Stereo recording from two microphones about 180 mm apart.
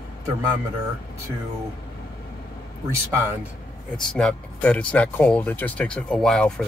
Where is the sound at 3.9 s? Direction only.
5° left (ahead or behind).